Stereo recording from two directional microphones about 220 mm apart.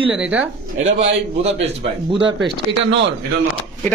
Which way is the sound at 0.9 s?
30° right (ahead or behind).